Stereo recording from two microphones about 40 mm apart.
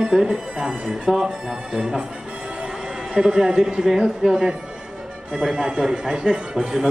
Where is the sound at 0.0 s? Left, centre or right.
Centre.